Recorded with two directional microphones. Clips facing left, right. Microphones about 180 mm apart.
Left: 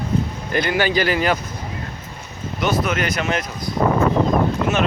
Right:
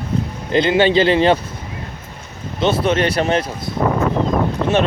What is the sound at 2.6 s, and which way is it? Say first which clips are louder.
Speech: right 5 dB; 30° right (ahead or behind).